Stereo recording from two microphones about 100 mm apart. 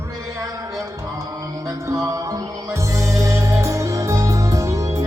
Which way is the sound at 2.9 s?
30° right (ahead or behind).